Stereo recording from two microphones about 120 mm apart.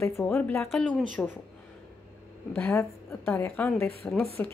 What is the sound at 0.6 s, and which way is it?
Speech, 5° left (ahead or behind).